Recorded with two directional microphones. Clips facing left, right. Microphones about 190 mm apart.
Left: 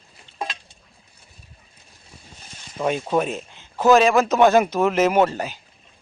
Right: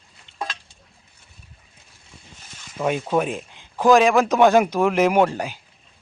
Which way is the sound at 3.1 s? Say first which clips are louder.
Even; 10° right (ahead or behind).